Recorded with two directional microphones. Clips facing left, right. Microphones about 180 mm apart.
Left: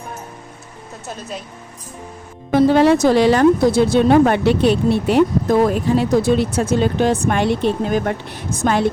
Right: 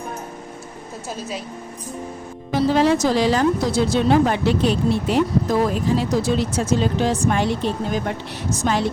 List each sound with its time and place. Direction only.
2.5 s speech: 55° left (ahead or behind)